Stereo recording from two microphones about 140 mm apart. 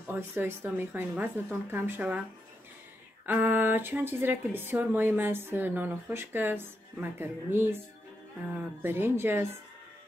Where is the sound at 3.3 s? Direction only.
10° right (ahead or behind).